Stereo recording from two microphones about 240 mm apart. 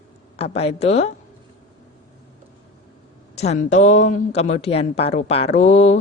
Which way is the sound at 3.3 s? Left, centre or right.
Left.